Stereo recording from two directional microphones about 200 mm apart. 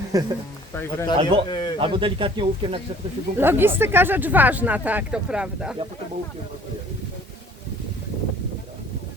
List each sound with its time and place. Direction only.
0.1 s speech: 15° right (ahead or behind)
0.8 s speech: 15° left (ahead or behind)
1.2 s speech: 30° right (ahead or behind)
1.5 s speech: 25° left (ahead or behind)
1.8 s speech: 25° right (ahead or behind)
3.3 s speech: 10° right (ahead or behind)